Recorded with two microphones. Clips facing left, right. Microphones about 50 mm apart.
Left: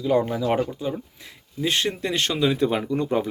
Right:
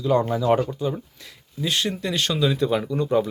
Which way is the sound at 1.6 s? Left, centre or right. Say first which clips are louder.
Left 1 dB; left.